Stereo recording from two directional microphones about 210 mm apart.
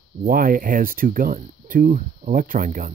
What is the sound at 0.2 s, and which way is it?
Speech, 40° right (ahead or behind).